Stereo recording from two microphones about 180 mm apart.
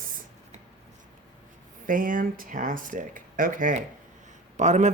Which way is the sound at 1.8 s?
50° right (ahead or behind).